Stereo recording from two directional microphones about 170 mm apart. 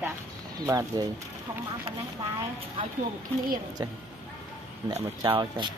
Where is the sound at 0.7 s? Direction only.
20° right (ahead or behind).